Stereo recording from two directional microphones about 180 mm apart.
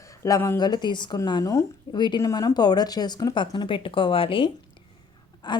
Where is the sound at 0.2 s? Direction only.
15° left (ahead or behind).